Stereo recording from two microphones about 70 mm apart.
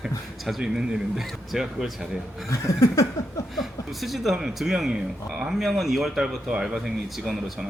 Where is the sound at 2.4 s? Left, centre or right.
Left.